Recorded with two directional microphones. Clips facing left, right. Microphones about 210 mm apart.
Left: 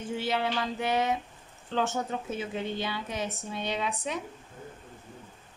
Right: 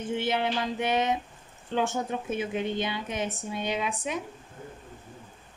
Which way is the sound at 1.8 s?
15° right (ahead or behind).